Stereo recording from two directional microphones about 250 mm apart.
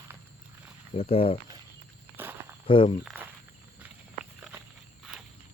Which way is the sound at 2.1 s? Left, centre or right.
Centre.